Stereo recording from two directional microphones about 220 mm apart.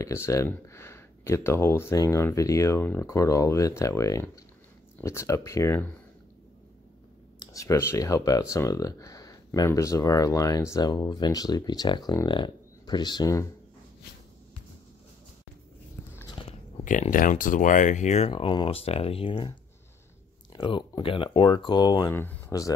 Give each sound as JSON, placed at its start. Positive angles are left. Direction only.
{"t": 0.0, "sound": "speech", "side_deg": 15}
{"t": 7.3, "sound": "speech", "side_deg": 15}
{"t": 16.1, "sound": "biting", "side_deg": 10}
{"t": 16.3, "sound": "speech", "side_deg": 30}
{"t": 20.5, "sound": "speech", "side_deg": 20}